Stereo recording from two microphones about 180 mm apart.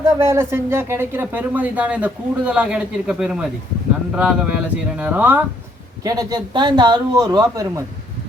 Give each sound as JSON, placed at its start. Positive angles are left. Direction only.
{"t": 0.2, "sound": "speech", "side_deg": -15}
{"t": 6.0, "sound": "speech", "side_deg": -20}